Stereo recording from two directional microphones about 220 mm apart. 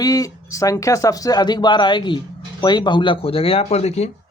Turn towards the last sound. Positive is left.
turn(degrees=30)  # may be behind; listen again after turning